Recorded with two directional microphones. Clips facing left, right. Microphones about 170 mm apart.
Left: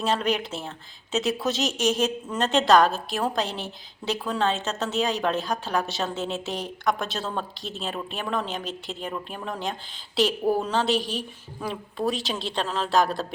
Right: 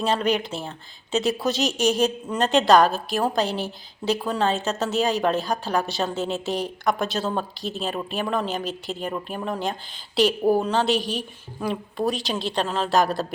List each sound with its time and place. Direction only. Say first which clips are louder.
0.0 s a woman's voice: right 2 dB; centre (ahead or behind)